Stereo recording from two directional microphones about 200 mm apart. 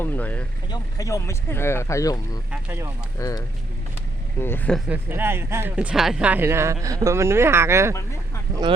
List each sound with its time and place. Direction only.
0.0 s speech: 10° left (ahead or behind)
2.5 s speech: 10° right (ahead or behind)
3.2 s speech: 15° left (ahead or behind)
4.9 s speech: 10° right (ahead or behind)